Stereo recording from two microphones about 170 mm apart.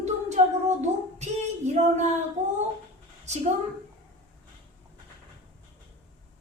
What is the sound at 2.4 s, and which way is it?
Humming, 45° right (ahead or behind).